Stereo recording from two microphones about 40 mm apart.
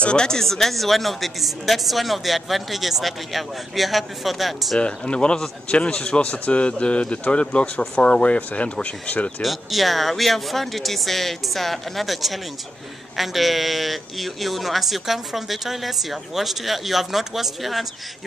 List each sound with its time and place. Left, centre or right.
0.0 s speech: left
0.4 s a man's voice: centre
4.7 s speech: left
6.3 s speech: left
9.4 s a man's voice: centre